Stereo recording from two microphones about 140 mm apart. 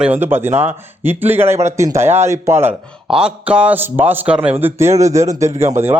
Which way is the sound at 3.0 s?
5° right (ahead or behind).